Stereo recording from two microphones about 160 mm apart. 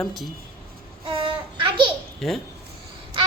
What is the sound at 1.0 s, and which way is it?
Child singing, 30° right (ahead or behind).